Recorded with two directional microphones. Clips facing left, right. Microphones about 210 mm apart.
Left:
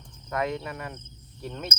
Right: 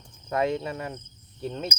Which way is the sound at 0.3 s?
25° right (ahead or behind).